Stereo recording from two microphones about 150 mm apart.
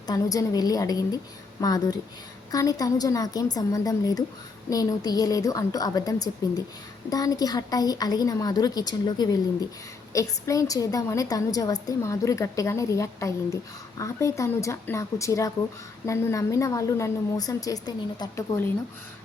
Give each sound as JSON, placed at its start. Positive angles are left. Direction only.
{"t": 0.1, "sound": "a woman's voice", "side_deg": 25}